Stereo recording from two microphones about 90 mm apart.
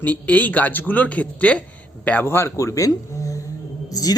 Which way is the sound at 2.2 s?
30° left (ahead or behind).